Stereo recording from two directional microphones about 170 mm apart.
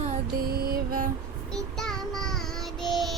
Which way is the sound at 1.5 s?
Centre (ahead or behind).